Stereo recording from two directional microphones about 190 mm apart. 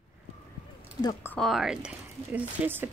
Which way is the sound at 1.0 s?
20° left (ahead or behind).